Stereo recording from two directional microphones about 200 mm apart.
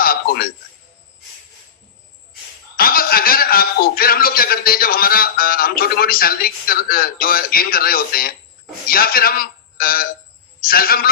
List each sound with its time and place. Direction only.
0.0 s a sound: 50° left (ahead or behind)
2.7 s chuckle: 45° left (ahead or behind)
8.9 s a man's voice: 45° left (ahead or behind)